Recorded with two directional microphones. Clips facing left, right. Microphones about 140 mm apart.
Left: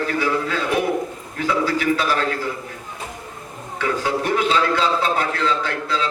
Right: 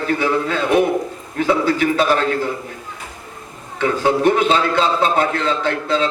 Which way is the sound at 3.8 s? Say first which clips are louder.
Right 5 dB; 25° right (ahead or behind).